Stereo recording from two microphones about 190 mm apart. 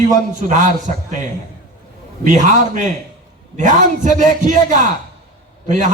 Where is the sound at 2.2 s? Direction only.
40° right (ahead or behind).